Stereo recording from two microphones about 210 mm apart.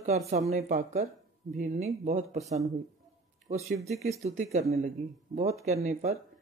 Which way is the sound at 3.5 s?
30° right (ahead or behind).